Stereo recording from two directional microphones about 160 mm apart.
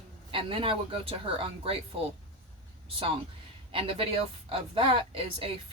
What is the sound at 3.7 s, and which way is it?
Speech, 35° right (ahead or behind).